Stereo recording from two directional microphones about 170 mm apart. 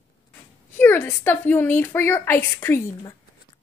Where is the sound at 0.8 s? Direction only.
10° left (ahead or behind).